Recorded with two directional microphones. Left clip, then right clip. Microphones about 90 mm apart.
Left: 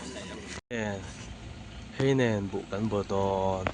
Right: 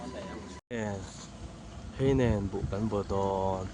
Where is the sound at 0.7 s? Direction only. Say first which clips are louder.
Left 2 dB; 5° right (ahead or behind).